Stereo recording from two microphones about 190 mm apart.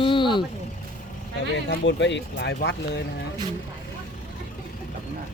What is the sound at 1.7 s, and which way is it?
Speech, 65° left (ahead or behind).